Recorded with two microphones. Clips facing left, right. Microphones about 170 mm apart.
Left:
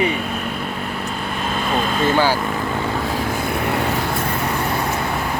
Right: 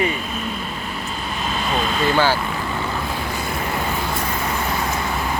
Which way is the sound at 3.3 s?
55° left (ahead or behind).